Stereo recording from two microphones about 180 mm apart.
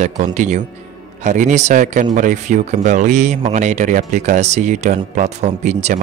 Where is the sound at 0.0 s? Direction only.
45° right (ahead or behind).